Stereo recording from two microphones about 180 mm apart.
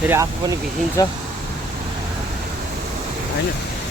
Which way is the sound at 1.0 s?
20° left (ahead or behind).